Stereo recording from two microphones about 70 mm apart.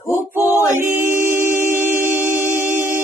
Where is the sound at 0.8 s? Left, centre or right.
Right.